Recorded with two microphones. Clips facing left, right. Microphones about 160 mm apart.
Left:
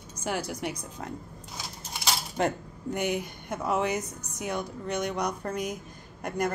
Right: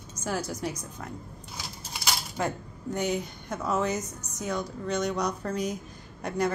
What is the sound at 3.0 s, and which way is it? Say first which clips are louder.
Speech: right 1 dB; 55° left (ahead or behind).